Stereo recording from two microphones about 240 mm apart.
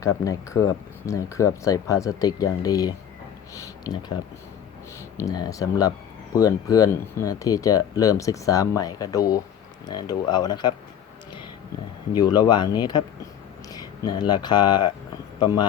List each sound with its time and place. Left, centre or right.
0.0 s speech: centre
5.2 s speech: centre
12.1 s speech: centre